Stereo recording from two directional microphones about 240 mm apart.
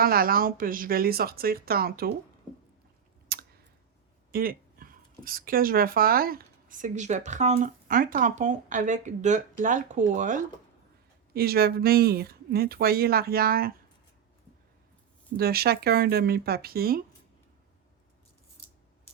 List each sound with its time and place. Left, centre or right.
0.0 s speech: right
3.3 s clicking: right
4.3 s speech: right
15.4 s speech: right